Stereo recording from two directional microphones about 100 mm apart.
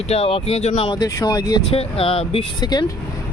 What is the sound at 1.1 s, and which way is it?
Speech, 35° left (ahead or behind).